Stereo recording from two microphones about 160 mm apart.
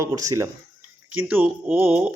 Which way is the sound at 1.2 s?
10° right (ahead or behind).